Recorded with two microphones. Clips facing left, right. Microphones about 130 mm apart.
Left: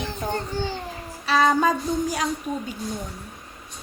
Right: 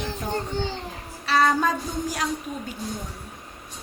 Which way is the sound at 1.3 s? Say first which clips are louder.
Left 2 dB; centre (ahead or behind).